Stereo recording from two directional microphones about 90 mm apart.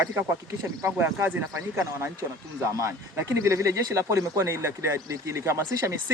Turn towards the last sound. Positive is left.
turn(degrees=-30)  # may be behind; listen again after turning